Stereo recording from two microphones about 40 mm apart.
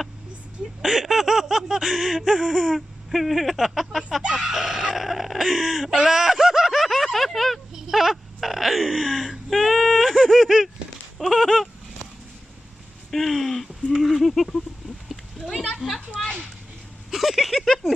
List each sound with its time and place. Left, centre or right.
0.8 s snicker: centre
4.2 s speech: right
4.5 s speech: centre
6.8 s a sound: centre
7.7 s a sound: centre
8.4 s speech: centre
11.1 s a sound: centre
13.1 s snicker: centre
15.8 s speech: centre
17.1 s snicker: centre